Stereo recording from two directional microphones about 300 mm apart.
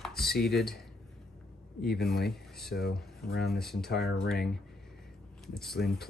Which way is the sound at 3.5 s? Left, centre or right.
Centre.